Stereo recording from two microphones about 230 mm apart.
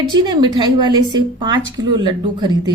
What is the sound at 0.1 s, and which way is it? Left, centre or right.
A woman's voice, centre.